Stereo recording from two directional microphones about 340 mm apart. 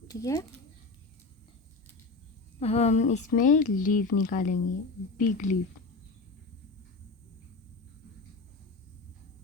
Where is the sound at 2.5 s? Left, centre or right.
Centre.